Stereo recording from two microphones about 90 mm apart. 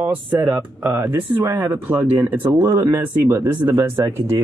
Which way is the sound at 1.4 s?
45° right (ahead or behind).